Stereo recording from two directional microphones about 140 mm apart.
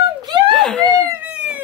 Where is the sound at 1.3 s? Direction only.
10° right (ahead or behind).